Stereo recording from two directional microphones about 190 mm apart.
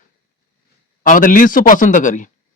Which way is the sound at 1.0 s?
45° left (ahead or behind).